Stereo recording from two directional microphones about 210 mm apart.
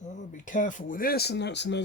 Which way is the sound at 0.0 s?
35° left (ahead or behind).